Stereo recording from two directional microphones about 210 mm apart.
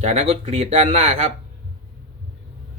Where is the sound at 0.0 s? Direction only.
30° right (ahead or behind).